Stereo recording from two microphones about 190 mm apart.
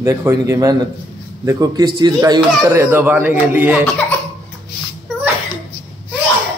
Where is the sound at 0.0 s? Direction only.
15° right (ahead or behind).